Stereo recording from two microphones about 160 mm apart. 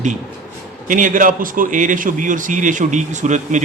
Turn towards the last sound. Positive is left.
turn(degrees=-50)  # may be behind; listen again after turning